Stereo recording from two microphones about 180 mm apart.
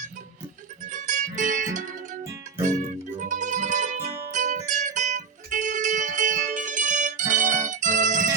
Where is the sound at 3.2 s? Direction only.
45° right (ahead or behind).